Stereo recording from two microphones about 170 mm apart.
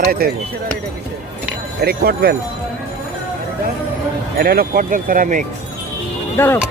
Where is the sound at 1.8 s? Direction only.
65° right (ahead or behind).